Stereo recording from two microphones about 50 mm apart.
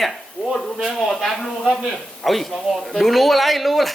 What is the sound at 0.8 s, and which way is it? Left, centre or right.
Speech, centre.